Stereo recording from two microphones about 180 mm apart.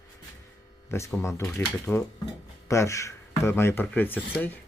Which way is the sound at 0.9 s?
15° left (ahead or behind).